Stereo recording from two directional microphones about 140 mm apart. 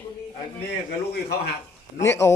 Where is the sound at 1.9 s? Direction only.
20° left (ahead or behind).